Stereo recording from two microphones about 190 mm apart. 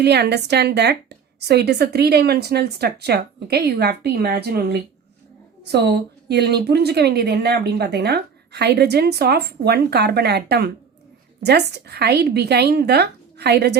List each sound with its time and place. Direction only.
0.0 s a woman's voice: 60° right (ahead or behind)